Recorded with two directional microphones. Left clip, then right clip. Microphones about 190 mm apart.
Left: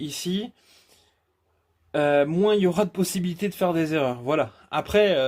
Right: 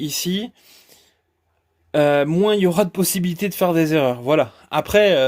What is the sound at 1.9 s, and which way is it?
Speech, 50° right (ahead or behind).